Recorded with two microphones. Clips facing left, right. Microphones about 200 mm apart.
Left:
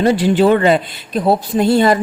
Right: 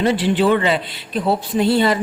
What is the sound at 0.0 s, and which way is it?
Speech, 45° left (ahead or behind).